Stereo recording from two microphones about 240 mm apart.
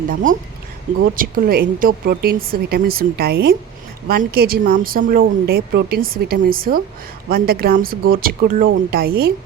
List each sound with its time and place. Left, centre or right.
0.1 s speech: right